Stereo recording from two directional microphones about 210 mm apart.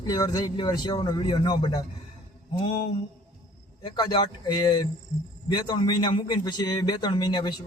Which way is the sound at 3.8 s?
20° left (ahead or behind).